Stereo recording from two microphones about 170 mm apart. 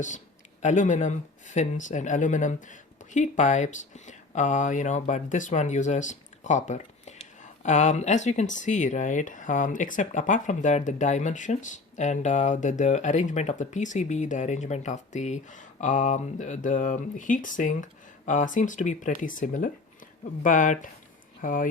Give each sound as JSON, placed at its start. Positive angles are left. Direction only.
{"t": 0.6, "sound": "speech", "side_deg": 45}